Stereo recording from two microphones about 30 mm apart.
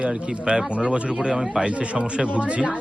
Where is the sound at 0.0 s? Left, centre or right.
Right.